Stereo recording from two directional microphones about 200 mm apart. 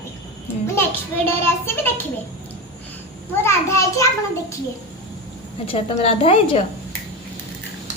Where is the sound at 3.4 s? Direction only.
15° left (ahead or behind).